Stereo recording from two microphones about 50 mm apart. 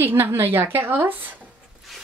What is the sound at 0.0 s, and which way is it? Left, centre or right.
A woman's voice, right.